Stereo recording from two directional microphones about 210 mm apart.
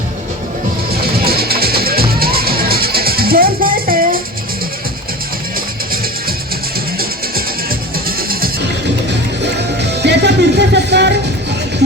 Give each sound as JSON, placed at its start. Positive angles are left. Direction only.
{"t": 1.0, "sound": "music", "side_deg": -45}
{"t": 9.6, "sound": "music", "side_deg": -55}